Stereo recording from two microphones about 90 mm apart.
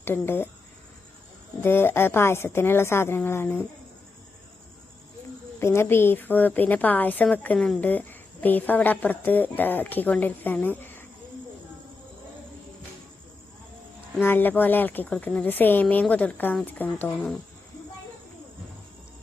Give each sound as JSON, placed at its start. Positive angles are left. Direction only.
{"t": 0.0, "sound": "a woman's voice", "side_deg": 25}
{"t": 1.6, "sound": "a woman's voice", "side_deg": 25}
{"t": 5.5, "sound": "a woman's voice", "side_deg": 30}
{"t": 14.2, "sound": "a woman's voice", "side_deg": 20}